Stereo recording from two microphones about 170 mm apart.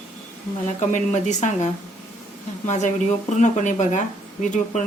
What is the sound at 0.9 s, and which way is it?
Speech, 45° left (ahead or behind).